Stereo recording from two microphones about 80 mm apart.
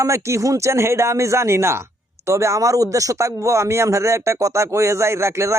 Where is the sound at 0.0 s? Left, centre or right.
Right.